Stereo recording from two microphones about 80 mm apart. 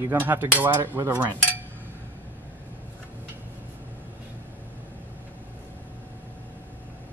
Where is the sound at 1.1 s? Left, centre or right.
Centre.